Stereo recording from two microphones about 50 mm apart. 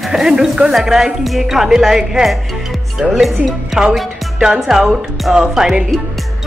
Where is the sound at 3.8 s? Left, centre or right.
Centre.